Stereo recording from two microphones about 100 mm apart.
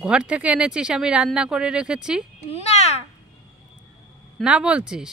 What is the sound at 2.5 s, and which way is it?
Speech, 90° left.